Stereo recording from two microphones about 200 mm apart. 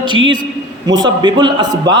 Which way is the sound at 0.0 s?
25° right (ahead or behind).